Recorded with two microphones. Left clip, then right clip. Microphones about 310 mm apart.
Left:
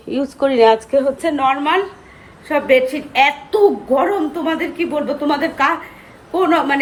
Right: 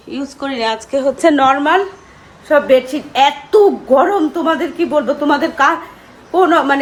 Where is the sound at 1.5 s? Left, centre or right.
Centre.